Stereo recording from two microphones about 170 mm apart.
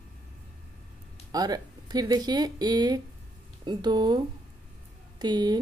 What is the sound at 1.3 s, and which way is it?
Speech, 25° right (ahead or behind).